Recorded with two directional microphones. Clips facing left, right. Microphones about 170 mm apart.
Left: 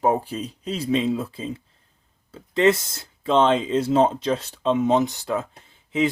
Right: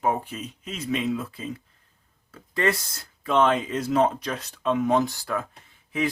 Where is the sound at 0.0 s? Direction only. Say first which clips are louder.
Left 4 dB; 35° left (ahead or behind).